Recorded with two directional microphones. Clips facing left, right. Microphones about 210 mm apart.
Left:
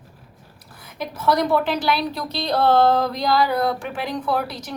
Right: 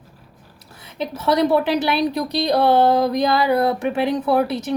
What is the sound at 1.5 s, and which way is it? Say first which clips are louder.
Speech: right 3 dB; 20° right (ahead or behind).